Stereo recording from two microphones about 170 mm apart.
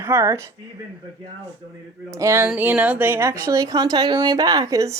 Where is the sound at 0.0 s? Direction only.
15° right (ahead or behind).